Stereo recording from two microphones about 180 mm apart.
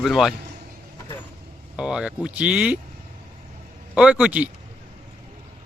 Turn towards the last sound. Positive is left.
turn(degrees=-10)  # may be behind; listen again after turning